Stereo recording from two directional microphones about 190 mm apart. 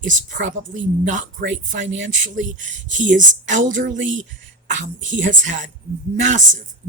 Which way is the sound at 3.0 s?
40° right (ahead or behind).